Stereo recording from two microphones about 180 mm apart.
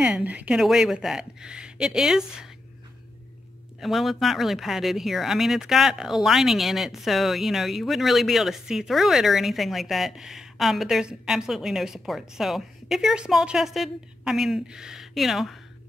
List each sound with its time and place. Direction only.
0.0 s speech: 10° right (ahead or behind)
3.8 s speech: centre (ahead or behind)